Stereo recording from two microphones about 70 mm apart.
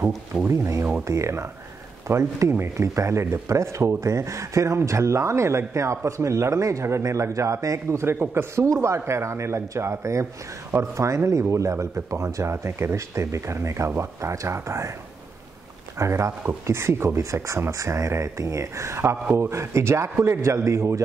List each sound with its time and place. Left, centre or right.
0.5 s speech: right
16.0 s a man's voice: right